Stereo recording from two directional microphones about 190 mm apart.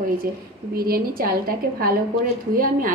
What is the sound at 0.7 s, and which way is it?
Speech, 50° right (ahead or behind).